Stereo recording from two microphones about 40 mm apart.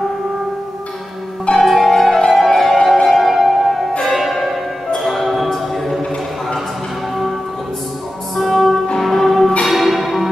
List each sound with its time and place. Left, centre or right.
1.6 s music: centre
4.1 s change ringing: centre
5.0 s music: centre
8.4 s music: centre